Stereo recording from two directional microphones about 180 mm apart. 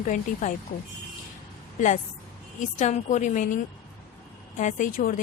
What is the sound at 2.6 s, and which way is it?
A woman's voice, 40° left (ahead or behind).